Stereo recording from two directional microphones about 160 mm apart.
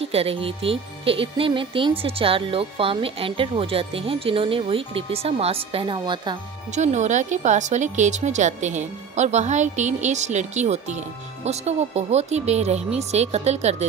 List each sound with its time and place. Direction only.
0.0 s speech: 40° right (ahead or behind)
6.7 s speech: 45° right (ahead or behind)